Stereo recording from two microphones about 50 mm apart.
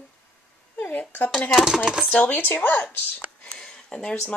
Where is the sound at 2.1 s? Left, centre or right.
Left.